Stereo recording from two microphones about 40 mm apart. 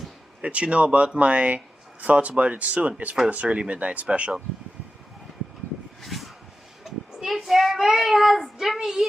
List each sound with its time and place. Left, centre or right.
0.4 s speech: right
6.0 s a sound: centre
6.8 s speech: centre
8.7 s child singing: centre